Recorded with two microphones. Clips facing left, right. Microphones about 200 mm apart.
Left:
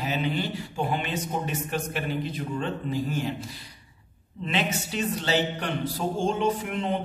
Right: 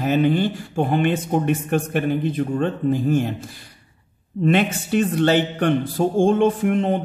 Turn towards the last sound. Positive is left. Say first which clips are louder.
# right 8 dB
turn(degrees=-50)  # may be behind; listen again after turning